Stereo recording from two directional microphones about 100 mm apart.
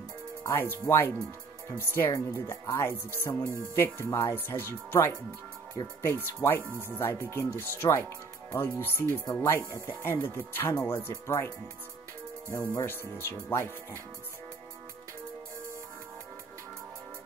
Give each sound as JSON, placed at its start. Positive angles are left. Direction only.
{"t": 0.5, "sound": "speech", "side_deg": 25}
{"t": 6.7, "sound": "speech", "side_deg": -20}
{"t": 7.0, "sound": "speech", "side_deg": 25}
{"t": 12.7, "sound": "speech", "side_deg": 25}